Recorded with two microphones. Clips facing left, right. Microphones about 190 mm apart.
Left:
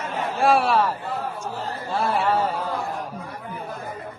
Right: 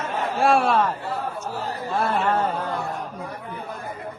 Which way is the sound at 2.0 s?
10° left (ahead or behind).